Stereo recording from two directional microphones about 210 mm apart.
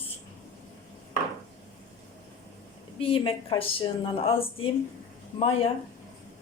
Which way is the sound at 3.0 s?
25° left (ahead or behind).